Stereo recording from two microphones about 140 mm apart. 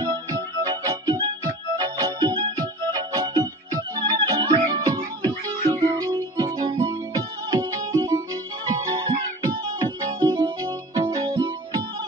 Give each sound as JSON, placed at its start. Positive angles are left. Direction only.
{"t": 0.0, "sound": "music", "side_deg": -30}